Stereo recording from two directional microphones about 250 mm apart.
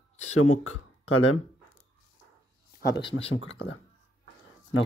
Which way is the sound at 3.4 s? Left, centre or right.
Left.